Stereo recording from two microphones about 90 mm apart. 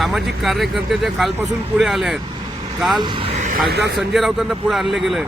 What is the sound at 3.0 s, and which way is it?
Speech, 70° right (ahead or behind).